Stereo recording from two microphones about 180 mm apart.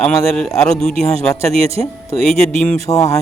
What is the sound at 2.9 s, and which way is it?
Speech, 20° left (ahead or behind).